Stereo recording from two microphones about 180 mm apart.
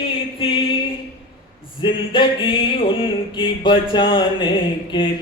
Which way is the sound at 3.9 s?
25° left (ahead or behind).